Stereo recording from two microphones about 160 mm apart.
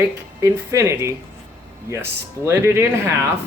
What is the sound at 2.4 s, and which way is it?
Speech, 15° right (ahead or behind).